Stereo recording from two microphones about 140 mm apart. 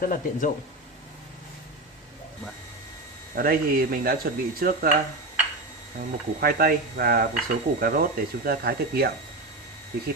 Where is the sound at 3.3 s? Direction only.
90° right.